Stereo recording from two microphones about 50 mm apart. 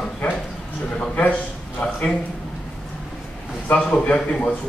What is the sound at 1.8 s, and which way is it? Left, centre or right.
Speech, left.